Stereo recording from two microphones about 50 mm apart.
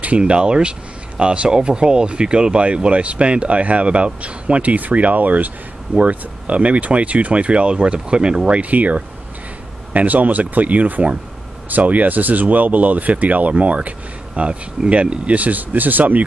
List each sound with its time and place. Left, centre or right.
0.0 s speech: right